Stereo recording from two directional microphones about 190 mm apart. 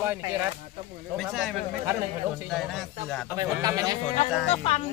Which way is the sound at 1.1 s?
Centre (ahead or behind).